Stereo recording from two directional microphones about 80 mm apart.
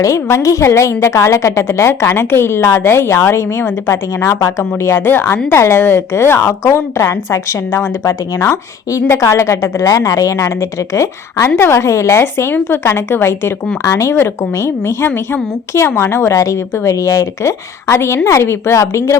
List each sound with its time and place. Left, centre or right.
0.4 s a woman's voice: left